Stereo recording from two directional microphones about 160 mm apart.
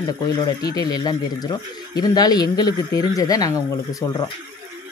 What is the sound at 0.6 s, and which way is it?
Speech, 25° left (ahead or behind).